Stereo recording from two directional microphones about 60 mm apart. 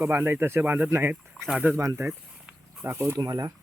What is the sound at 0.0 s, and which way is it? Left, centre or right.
Speech, right.